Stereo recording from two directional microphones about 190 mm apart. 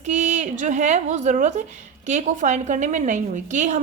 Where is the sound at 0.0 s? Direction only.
40° right (ahead or behind).